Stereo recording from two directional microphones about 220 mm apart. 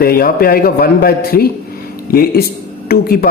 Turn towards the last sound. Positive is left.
turn(degrees=45)  # may be behind; listen again after turning